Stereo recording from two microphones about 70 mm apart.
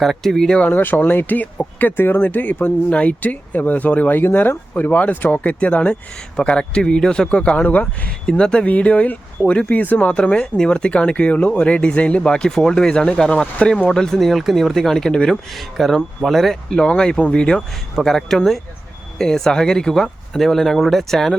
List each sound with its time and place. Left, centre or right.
0.0 s speech: centre
0.6 s speech: left; by 16.6 s centre
16.6 s speech: centre